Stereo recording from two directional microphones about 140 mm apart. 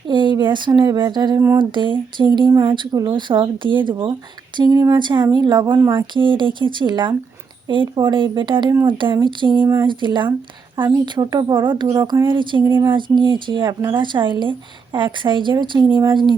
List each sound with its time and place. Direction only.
0.1 s a sound: 35° right (ahead or behind)
0.8 s speech: 30° right (ahead or behind)
12.3 s speech: 35° right (ahead or behind)